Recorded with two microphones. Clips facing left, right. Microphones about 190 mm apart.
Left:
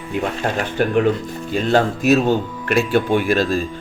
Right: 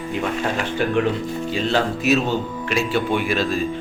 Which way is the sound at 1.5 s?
50° left (ahead or behind).